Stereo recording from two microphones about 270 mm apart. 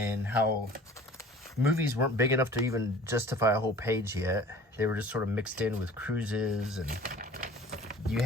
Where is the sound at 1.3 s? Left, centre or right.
Centre.